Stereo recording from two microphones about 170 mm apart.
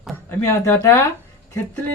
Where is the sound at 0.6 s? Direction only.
15° left (ahead or behind).